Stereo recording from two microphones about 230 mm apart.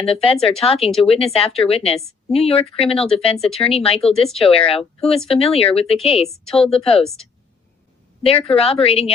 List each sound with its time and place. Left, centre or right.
0.0 s speech: left
8.2 s speech: left